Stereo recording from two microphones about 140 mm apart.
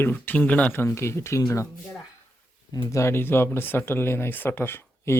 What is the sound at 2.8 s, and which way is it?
Speech, 20° left (ahead or behind).